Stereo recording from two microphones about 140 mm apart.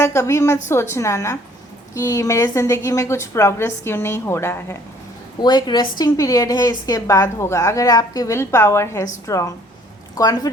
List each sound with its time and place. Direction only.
0.0 s a woman's voice: 20° left (ahead or behind)
5.4 s a woman's voice: 30° left (ahead or behind)